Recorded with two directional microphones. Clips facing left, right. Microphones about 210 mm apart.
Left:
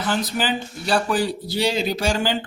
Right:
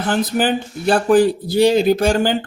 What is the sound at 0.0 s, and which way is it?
Speech, 55° right (ahead or behind).